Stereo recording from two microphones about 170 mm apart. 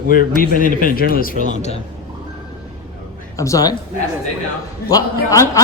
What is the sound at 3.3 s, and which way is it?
Speech, 20° left (ahead or behind).